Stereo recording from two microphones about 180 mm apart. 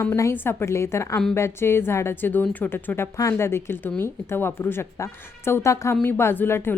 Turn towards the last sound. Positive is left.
turn(degrees=10)  # may be behind; listen again after turning